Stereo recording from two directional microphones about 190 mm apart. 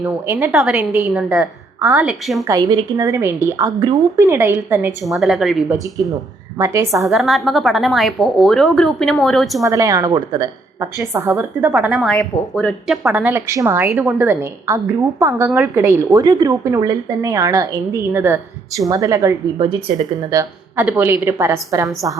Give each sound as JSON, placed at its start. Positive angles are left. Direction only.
{"t": 0.0, "sound": "a woman's voice", "side_deg": -10}
{"t": 2.4, "sound": "a woman's voice", "side_deg": -20}
{"t": 5.0, "sound": "a woman's voice", "side_deg": 0}
{"t": 5.8, "sound": "speech", "side_deg": -20}
{"t": 7.1, "sound": "a woman's voice", "side_deg": 0}
{"t": 9.6, "sound": "a woman's voice", "side_deg": -15}
{"t": 13.1, "sound": "a woman's voice", "side_deg": -10}